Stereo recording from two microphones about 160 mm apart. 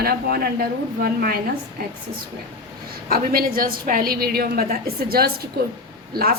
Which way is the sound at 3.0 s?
70° right (ahead or behind).